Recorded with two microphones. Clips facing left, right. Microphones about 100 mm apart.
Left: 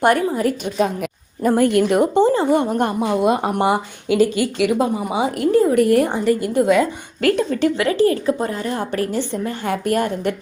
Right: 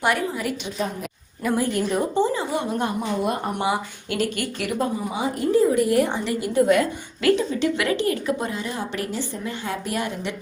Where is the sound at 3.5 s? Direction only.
55° left (ahead or behind).